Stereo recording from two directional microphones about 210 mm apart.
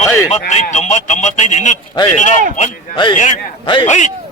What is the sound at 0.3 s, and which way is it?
A man's voice, 30° left (ahead or behind).